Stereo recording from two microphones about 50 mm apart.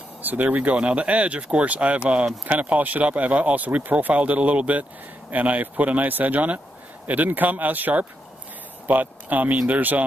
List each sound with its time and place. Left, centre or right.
0.2 s speech: right